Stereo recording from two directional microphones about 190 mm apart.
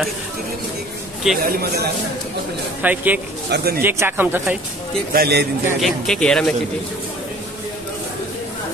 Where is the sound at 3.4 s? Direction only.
55° right (ahead or behind).